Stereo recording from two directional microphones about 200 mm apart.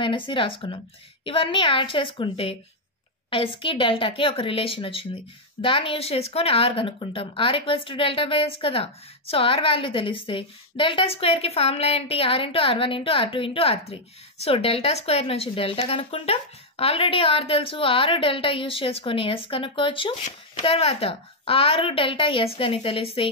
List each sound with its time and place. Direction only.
0.0 s speech: 25° left (ahead or behind)